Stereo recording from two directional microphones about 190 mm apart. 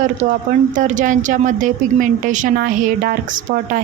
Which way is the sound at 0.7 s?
40° right (ahead or behind).